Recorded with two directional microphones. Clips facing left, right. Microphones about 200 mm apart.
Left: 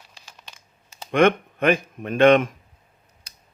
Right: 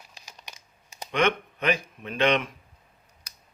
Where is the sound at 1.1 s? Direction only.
50° left (ahead or behind).